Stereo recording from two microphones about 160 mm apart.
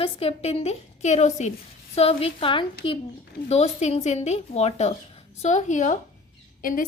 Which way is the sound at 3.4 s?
45° left (ahead or behind).